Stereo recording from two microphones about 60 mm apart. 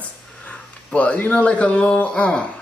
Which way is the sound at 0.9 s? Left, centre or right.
Left.